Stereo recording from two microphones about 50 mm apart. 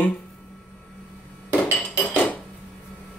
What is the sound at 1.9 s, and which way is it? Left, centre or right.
Dishes, left.